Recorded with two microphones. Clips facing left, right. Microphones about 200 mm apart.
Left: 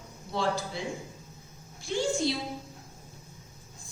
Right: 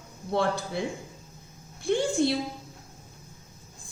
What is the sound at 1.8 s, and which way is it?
Speech, 55° right (ahead or behind).